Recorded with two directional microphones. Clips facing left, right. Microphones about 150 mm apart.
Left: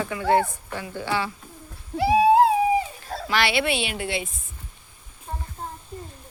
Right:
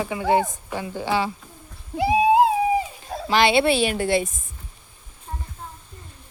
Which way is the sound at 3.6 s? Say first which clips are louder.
Right 6 dB; 40° right (ahead or behind).